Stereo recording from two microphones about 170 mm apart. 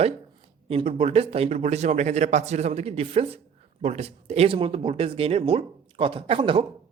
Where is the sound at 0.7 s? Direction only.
35° right (ahead or behind).